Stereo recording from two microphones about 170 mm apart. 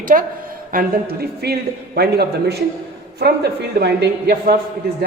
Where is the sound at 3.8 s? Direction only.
70° right (ahead or behind).